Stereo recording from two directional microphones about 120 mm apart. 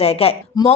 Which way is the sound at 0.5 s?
35° left (ahead or behind).